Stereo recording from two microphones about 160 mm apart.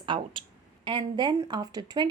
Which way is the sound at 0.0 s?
30° right (ahead or behind).